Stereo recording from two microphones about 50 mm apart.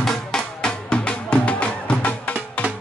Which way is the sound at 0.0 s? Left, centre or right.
Centre.